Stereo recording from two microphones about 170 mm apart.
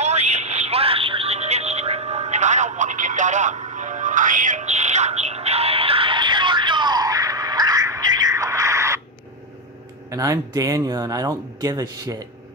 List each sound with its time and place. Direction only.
0.0 s music: 40° right (ahead or behind); by 9.0 s 15° right (ahead or behind)
10.1 s speech: 20° right (ahead or behind)